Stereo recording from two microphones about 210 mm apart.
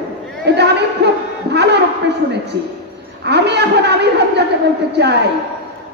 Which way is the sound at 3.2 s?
55° right (ahead or behind).